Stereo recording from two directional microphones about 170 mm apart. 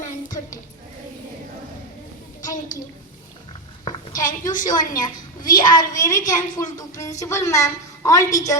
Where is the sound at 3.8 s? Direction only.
20° left (ahead or behind).